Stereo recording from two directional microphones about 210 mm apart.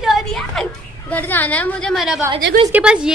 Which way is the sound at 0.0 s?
Centre (ahead or behind).